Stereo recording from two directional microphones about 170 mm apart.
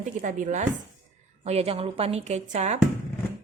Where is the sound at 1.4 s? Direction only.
35° right (ahead or behind).